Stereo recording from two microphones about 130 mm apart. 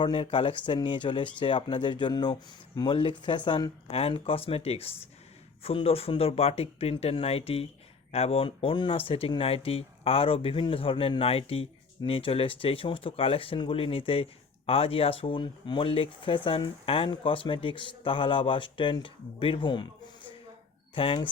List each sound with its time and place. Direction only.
0.0 s speech: 45° left (ahead or behind)
3.8 s speech: 50° left (ahead or behind)
20.9 s speech: 45° left (ahead or behind)